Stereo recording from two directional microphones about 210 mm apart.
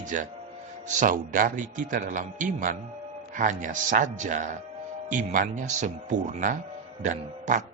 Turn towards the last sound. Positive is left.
turn(degrees=-35)  # may be behind; listen again after turning